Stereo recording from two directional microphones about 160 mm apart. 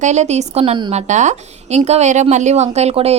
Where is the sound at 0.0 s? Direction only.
45° right (ahead or behind).